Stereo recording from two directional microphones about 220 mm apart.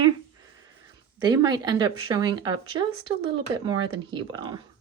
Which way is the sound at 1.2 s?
15° right (ahead or behind).